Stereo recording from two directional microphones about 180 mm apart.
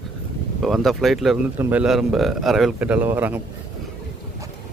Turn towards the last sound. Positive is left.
turn(degrees=-10)  # may be behind; listen again after turning